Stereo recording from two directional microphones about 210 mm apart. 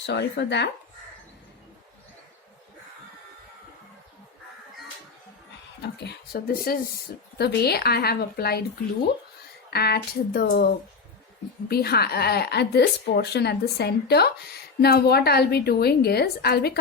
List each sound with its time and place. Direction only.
0.0 s a woman's voice: 55° left (ahead or behind)
5.8 s a woman's voice: 50° left (ahead or behind)
9.6 s a woman's voice: 50° left (ahead or behind)
11.7 s a woman's voice: 50° left (ahead or behind)